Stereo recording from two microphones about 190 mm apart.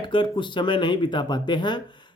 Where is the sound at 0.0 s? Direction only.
25° left (ahead or behind).